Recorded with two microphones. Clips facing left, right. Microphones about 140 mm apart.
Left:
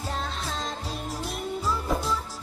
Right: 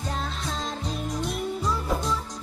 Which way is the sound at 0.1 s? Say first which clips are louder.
Even; centre (ahead or behind).